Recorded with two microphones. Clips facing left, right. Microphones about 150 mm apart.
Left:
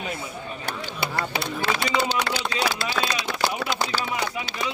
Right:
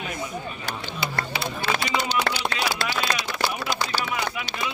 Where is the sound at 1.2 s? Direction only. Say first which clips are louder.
Left 2 dB; 65° left (ahead or behind).